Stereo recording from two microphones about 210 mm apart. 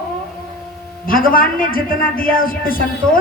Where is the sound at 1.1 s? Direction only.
45° left (ahead or behind).